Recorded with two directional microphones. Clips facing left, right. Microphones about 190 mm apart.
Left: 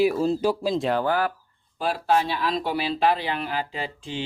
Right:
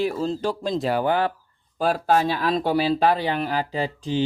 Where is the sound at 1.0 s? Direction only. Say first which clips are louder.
Right 2 dB; 20° right (ahead or behind).